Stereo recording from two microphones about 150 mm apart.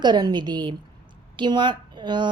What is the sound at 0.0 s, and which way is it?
A woman's voice, 30° right (ahead or behind).